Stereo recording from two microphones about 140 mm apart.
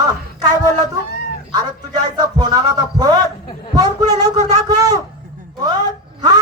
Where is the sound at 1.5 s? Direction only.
30° right (ahead or behind).